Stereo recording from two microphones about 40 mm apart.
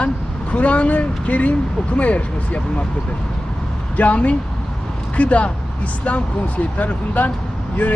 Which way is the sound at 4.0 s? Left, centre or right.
Left.